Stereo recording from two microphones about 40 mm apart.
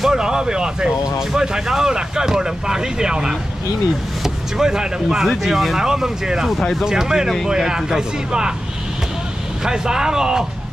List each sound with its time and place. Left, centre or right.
0.0 s speech: centre
5.2 s speech: centre
9.7 s speech: centre